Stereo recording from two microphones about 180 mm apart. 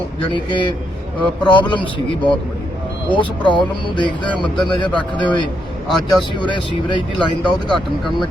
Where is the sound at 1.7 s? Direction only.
25° left (ahead or behind).